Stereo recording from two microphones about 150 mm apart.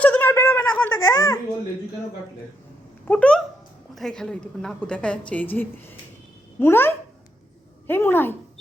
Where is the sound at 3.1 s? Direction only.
10° left (ahead or behind).